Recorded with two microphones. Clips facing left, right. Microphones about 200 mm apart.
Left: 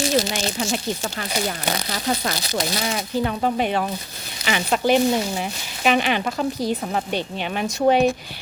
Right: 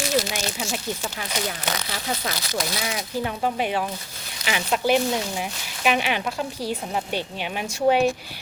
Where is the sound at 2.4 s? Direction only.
25° left (ahead or behind).